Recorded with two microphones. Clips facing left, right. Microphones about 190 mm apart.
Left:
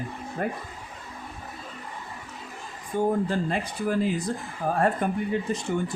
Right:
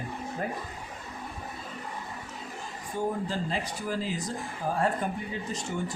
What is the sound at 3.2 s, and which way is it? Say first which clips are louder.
Speech: left 4 dB; 55° left (ahead or behind).